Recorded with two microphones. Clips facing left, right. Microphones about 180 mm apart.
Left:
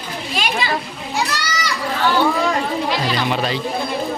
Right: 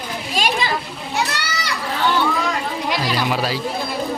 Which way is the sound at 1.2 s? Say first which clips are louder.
Left 1 dB; 60° right (ahead or behind).